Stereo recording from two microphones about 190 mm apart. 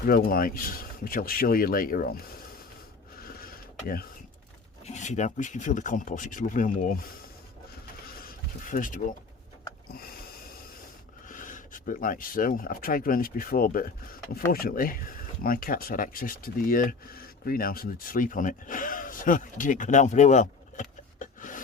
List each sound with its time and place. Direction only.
0.0 s speech: 50° left (ahead or behind)
3.2 s a sound: 50° left (ahead or behind)
4.9 s speech: 40° left (ahead or behind)
8.6 s speech: 45° left (ahead or behind)
11.3 s speech: 45° left (ahead or behind)